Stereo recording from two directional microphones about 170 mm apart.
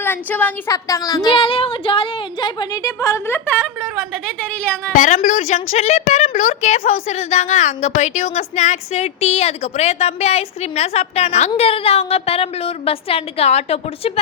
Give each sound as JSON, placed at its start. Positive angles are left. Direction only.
{"t": 0.0, "sound": "speech", "side_deg": 10}
{"t": 4.9, "sound": "a woman's voice", "side_deg": 50}